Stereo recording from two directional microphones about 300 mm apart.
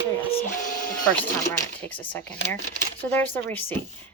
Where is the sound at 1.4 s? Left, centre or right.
Centre.